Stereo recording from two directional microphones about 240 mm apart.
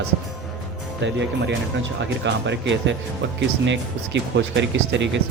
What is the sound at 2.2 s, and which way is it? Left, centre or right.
Speech, right.